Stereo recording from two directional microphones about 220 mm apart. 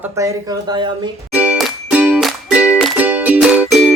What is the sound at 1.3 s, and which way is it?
Music, 5° right (ahead or behind).